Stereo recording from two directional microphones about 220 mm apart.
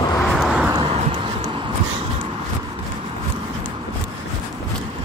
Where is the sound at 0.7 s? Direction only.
15° right (ahead or behind).